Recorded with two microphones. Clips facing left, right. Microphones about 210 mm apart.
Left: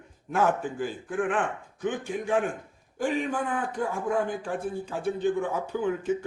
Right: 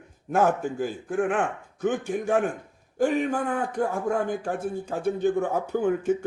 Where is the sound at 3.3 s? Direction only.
40° right (ahead or behind).